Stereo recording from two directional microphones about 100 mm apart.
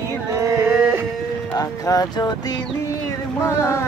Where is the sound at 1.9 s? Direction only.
40° left (ahead or behind).